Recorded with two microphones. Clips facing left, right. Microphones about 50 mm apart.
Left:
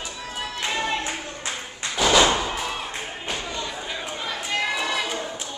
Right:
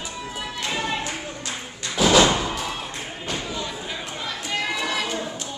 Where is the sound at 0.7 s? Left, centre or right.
Centre.